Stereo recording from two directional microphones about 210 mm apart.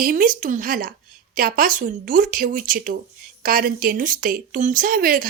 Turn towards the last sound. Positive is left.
turn(degrees=-40)  # may be behind; listen again after turning